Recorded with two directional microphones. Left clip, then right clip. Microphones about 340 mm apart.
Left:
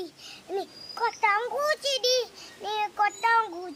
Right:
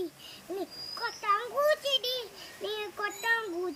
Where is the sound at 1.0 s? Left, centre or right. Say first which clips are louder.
Left 5 dB; centre.